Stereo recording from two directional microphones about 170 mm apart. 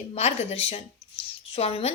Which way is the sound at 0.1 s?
35° left (ahead or behind).